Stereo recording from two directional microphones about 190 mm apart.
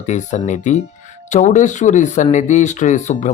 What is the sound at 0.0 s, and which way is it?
Speech, 40° left (ahead or behind).